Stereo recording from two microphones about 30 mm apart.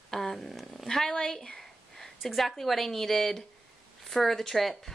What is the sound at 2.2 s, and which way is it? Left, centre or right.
Speech, centre.